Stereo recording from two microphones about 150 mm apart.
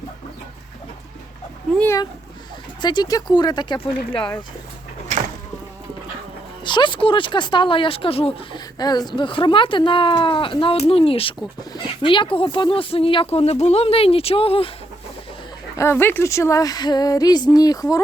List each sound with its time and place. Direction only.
2.8 s speech: 30° left (ahead or behind)
6.7 s speech: 30° left (ahead or behind)
8.8 s speech: 25° left (ahead or behind)
15.7 s speech: 20° left (ahead or behind)